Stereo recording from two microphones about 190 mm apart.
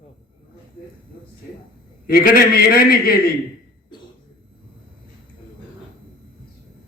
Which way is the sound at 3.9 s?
25° left (ahead or behind).